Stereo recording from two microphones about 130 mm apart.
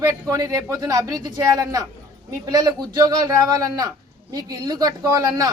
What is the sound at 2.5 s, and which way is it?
A man's voice, 30° right (ahead or behind).